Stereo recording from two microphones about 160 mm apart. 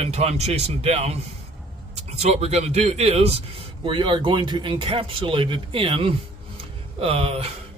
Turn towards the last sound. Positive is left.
turn(degrees=-35)  # may be behind; listen again after turning